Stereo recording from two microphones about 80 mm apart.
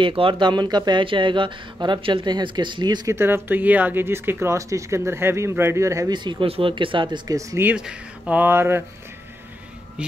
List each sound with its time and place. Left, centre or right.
0.0 s speech: right
3.1 s speech: right
6.0 s speech: right
7.7 s speech: centre
8.4 s speech: right